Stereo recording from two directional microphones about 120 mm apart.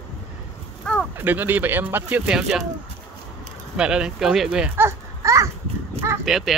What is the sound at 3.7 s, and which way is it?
Speech, 5° right (ahead or behind).